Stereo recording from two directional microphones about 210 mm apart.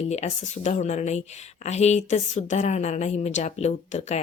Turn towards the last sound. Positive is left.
turn(degrees=35)  # may be behind; listen again after turning